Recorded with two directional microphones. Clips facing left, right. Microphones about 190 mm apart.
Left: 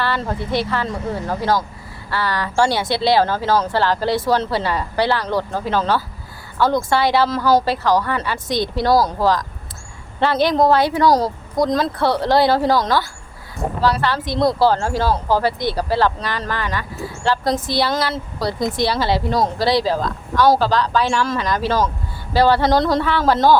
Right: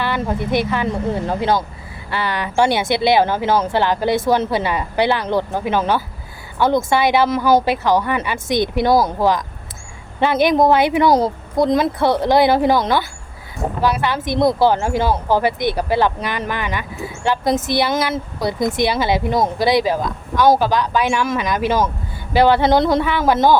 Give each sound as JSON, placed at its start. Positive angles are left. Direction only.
{"t": 0.0, "sound": "a woman's voice", "side_deg": -15}